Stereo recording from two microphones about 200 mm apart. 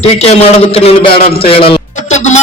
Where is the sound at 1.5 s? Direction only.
25° left (ahead or behind).